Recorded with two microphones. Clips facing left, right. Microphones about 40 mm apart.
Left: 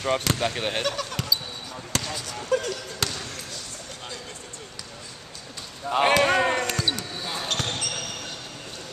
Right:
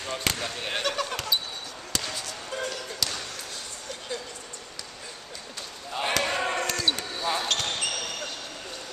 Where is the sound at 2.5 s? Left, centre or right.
Left.